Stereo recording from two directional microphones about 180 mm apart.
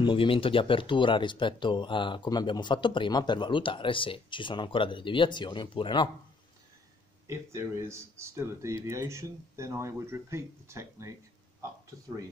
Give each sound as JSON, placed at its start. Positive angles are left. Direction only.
{"t": 0.0, "sound": "speech", "side_deg": 30}
{"t": 7.2, "sound": "speech", "side_deg": -15}